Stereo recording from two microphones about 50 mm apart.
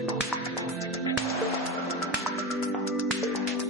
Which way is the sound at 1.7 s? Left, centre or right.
Right.